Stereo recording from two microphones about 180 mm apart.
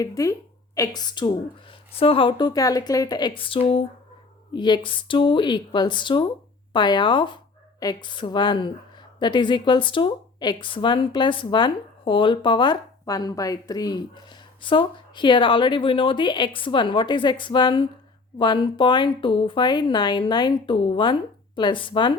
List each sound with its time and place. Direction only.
0.0 s a woman's voice: 20° left (ahead or behind)